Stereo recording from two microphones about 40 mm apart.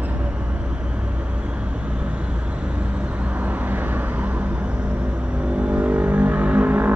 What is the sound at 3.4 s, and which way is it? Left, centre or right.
Vehicle, right.